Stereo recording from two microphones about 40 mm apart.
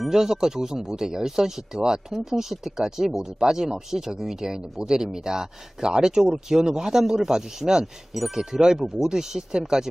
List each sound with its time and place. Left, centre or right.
0.1 s speech: centre